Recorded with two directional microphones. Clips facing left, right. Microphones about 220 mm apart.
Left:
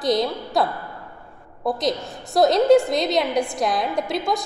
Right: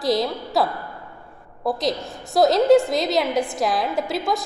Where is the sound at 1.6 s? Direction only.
Centre (ahead or behind).